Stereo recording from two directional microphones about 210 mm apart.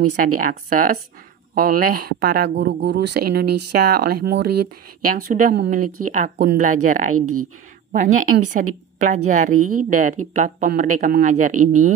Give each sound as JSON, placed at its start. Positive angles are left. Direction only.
{"t": 0.2, "sound": "speech", "side_deg": -40}
{"t": 7.2, "sound": "speech", "side_deg": -90}
{"t": 8.5, "sound": "a woman's voice", "side_deg": -35}